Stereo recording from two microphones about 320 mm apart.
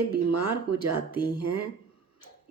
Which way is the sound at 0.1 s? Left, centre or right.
Right.